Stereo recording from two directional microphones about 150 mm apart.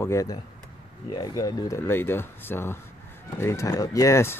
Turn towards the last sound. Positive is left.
turn(degrees=15)  # may be behind; listen again after turning